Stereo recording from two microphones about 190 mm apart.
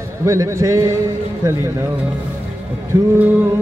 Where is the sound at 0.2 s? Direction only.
15° right (ahead or behind).